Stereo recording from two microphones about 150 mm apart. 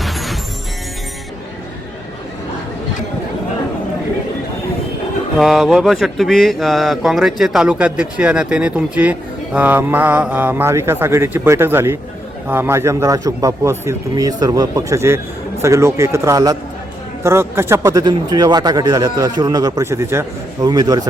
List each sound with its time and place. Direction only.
0.0 s music: centre (ahead or behind)
5.4 s speech: centre (ahead or behind); by 21.1 s 25° right (ahead or behind)